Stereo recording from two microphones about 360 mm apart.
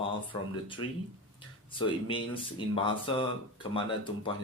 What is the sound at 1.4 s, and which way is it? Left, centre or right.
Speech, centre.